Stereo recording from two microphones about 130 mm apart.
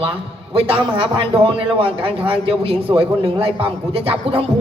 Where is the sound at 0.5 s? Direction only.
45° right (ahead or behind).